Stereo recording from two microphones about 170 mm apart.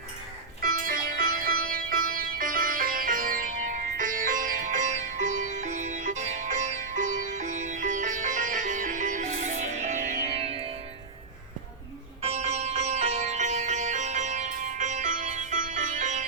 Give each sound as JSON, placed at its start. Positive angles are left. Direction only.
{"t": 0.6, "sound": "music", "side_deg": -55}
{"t": 12.2, "sound": "music", "side_deg": -40}